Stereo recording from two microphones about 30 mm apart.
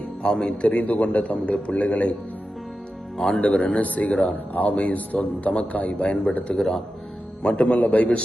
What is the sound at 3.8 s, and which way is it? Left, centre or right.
A man's voice, left.